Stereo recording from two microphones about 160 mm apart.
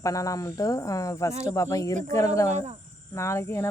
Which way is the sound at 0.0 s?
20° left (ahead or behind).